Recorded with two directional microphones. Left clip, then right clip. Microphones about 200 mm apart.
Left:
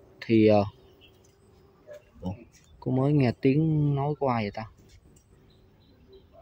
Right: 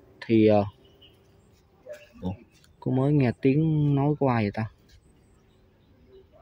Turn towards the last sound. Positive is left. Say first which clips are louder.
# right 2 dB
turn(degrees=-15)  # may be behind; listen again after turning